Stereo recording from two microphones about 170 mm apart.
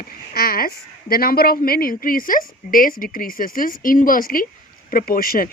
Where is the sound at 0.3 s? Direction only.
60° left (ahead or behind).